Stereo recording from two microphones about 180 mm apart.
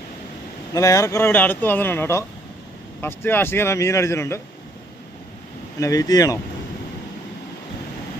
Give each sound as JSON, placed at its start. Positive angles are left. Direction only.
{"t": 0.7, "sound": "speech", "side_deg": 15}
{"t": 5.8, "sound": "speech", "side_deg": 20}